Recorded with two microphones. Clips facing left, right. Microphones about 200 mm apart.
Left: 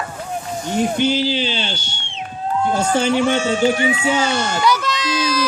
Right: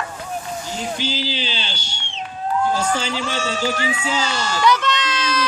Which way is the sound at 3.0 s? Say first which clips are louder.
Left 8 dB; 55° left (ahead or behind).